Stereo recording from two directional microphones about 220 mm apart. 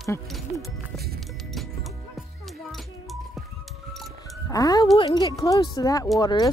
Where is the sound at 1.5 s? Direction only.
Centre (ahead or behind).